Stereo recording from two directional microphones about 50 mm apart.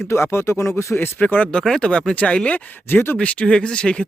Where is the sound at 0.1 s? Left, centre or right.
Left.